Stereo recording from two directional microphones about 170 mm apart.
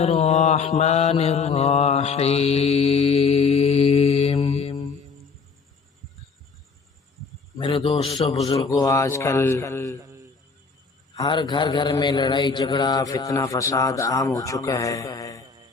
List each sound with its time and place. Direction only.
0.0 s mantra: 40° left (ahead or behind)
7.6 s a man's voice: 30° left (ahead or behind); by 10.0 s 15° left (ahead or behind)
10.0 s a sound: 15° right (ahead or behind)
11.2 s a man's voice: 25° left (ahead or behind)